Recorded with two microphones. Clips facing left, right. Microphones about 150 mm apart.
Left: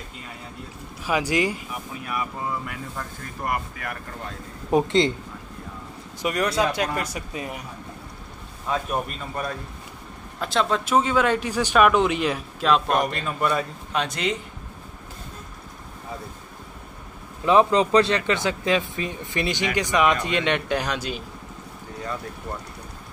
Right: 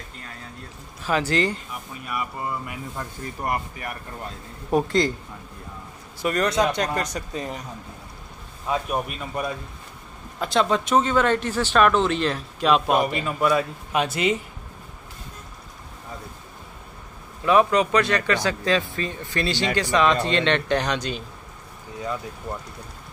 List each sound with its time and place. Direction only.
1.0 s speech: 10° left (ahead or behind)
2.0 s a man's voice: 5° right (ahead or behind)
4.6 s a man's voice: 20° left (ahead or behind)
6.2 s speech: 10° left (ahead or behind)
8.6 s a man's voice: 5° right (ahead or behind); by 12.6 s 10° left (ahead or behind)
12.6 s a man's voice: 5° right (ahead or behind)
17.5 s speech: 25° left (ahead or behind); by 21.2 s 5° left (ahead or behind)